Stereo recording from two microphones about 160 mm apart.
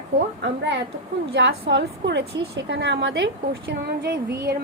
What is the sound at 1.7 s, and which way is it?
A woman's voice, 90° right.